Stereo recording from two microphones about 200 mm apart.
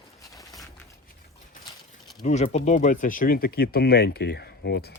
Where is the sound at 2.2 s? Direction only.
35° left (ahead or behind).